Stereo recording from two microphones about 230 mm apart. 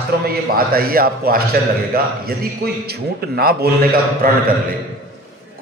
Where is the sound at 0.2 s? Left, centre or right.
Right.